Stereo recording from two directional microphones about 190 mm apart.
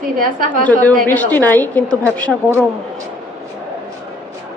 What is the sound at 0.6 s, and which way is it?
A woman's voice, 10° left (ahead or behind).